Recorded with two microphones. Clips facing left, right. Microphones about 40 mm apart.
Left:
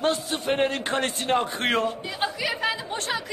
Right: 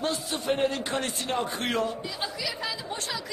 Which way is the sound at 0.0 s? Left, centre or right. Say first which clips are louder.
Left 4 dB; left.